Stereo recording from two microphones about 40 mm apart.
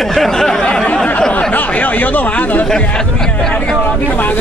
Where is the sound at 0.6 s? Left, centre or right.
Centre.